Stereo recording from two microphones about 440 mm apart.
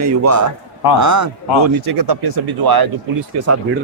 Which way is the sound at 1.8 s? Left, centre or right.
Right.